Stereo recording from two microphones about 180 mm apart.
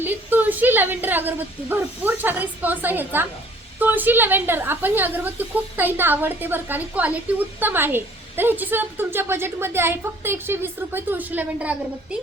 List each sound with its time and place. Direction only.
0.0 s a woman's voice: 10° right (ahead or behind)